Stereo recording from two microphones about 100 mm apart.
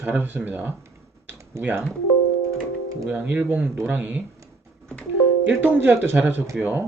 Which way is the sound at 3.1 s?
15° right (ahead or behind).